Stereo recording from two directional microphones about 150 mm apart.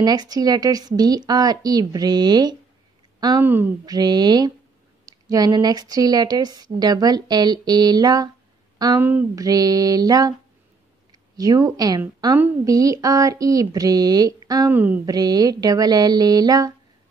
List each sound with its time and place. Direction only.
0.0 s a woman's voice: 25° right (ahead or behind)
3.4 s speech: 15° right (ahead or behind)
3.8 s a woman's voice: 25° right (ahead or behind)
14.7 s speech: 10° right (ahead or behind)
15.0 s a woman's voice: 25° right (ahead or behind)